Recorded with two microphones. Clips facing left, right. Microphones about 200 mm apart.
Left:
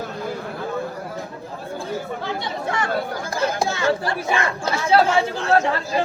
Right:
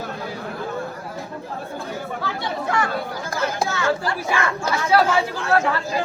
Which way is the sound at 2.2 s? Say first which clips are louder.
Even; 25° left (ahead or behind).